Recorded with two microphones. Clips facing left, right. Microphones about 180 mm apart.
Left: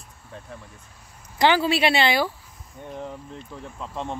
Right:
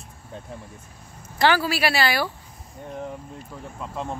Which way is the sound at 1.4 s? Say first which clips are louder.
Left 1 dB; 20° left (ahead or behind).